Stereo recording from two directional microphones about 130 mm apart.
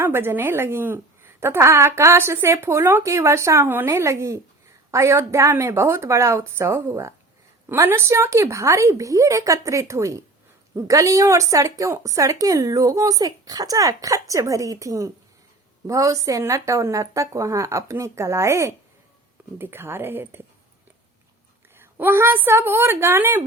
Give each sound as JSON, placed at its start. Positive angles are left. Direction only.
{"t": 0.0, "sound": "a woman's voice", "side_deg": -15}
{"t": 21.8, "sound": "a woman's voice", "side_deg": -15}